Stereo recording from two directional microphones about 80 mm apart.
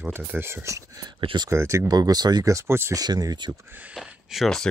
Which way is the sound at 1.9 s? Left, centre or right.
Right.